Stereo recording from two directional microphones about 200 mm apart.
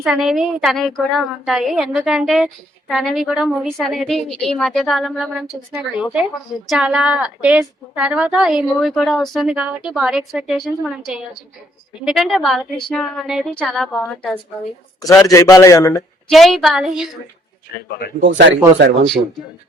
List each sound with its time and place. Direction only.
0.0 s a woman's voice: centre (ahead or behind)
6.7 s a woman's voice: 5° right (ahead or behind)
15.3 s a man's voice: 15° left (ahead or behind)
16.3 s a woman's voice: centre (ahead or behind)
18.2 s speech: 65° right (ahead or behind)